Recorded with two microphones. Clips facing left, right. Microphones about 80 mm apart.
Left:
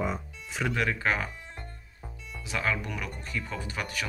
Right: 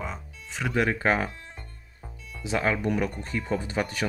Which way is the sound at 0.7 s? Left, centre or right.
Right.